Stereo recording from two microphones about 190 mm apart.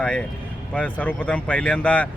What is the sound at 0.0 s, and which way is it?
Speech, 5° left (ahead or behind).